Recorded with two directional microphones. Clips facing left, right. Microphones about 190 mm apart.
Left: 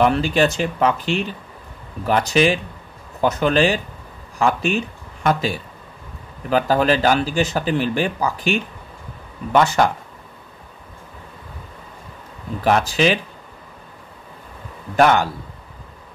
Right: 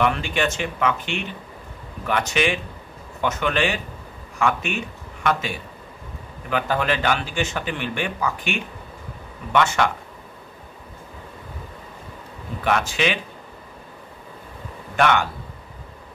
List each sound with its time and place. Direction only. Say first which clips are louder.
0.0 s speech: left 5 dB; 35° left (ahead or behind)
12.6 s speech: left 5 dB; 35° left (ahead or behind)
15.0 s speech: left 4 dB; 35° left (ahead or behind)